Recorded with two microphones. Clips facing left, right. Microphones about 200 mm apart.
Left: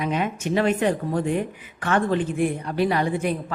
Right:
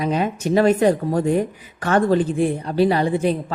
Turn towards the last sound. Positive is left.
turn(degrees=-30)  # may be behind; listen again after turning